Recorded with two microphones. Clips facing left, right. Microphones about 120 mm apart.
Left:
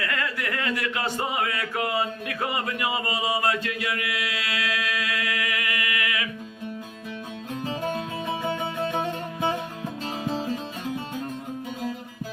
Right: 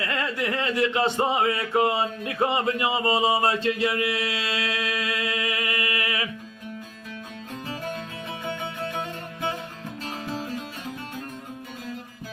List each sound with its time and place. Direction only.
0.0 s speech: 25° right (ahead or behind)
8.3 s music: 30° left (ahead or behind)